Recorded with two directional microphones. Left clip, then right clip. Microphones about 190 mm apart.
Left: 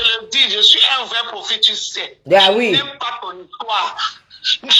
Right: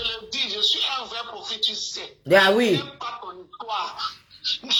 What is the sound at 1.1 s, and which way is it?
Speech, 25° left (ahead or behind).